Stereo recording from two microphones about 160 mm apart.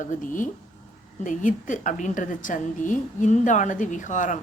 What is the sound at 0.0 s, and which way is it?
A woman's voice, 55° left (ahead or behind).